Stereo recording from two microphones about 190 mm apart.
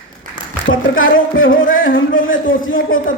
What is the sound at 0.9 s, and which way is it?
Speech, 90° left.